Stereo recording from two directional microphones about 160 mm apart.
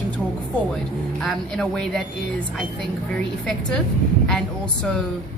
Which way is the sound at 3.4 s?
5° left (ahead or behind).